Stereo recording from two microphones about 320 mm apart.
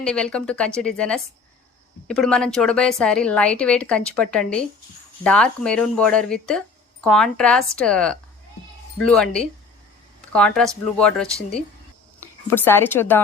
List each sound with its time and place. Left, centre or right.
0.0 s a woman's voice: centre